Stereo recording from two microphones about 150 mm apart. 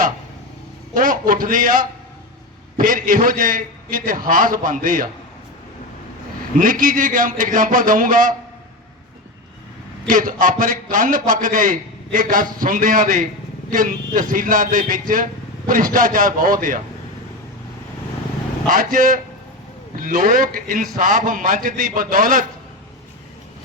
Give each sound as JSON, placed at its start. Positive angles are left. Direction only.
{"t": 0.9, "sound": "a man's voice", "side_deg": -65}
{"t": 6.6, "sound": "a man's voice", "side_deg": -65}
{"t": 10.1, "sound": "a man's voice", "side_deg": -65}
{"t": 18.7, "sound": "a man's voice", "side_deg": -65}